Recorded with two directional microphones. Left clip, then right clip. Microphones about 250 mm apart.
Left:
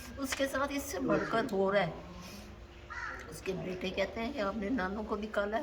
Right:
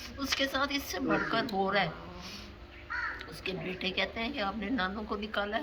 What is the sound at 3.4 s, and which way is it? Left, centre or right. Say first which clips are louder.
A woman's voice: right 2 dB; centre.